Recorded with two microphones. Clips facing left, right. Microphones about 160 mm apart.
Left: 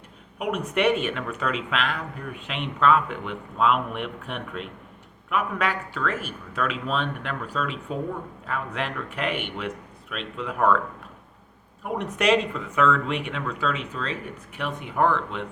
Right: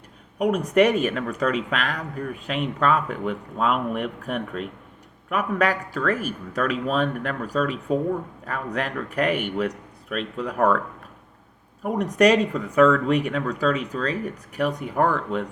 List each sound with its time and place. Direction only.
0.3 s speech: 35° right (ahead or behind)
12.1 s speech: 40° right (ahead or behind)